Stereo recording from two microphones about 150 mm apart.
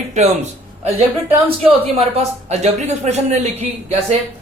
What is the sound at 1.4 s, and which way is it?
Speech, 40° right (ahead or behind).